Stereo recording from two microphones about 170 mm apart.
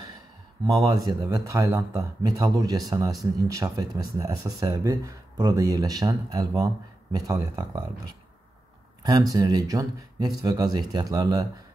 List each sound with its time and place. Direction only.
0.7 s speech: 20° right (ahead or behind)
9.3 s speech: 20° right (ahead or behind)